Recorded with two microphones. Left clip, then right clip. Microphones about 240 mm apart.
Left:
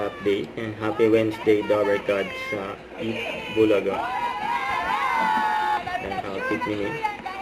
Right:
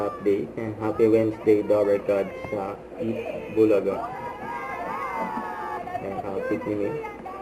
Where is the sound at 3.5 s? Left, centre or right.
Left.